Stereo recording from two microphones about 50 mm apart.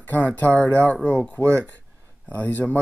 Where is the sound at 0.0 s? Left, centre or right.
Left.